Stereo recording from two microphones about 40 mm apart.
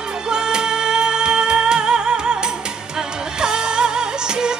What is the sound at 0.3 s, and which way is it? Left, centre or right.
Music, centre.